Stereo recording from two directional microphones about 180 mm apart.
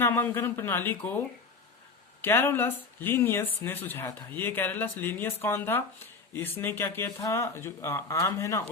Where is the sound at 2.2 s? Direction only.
10° left (ahead or behind).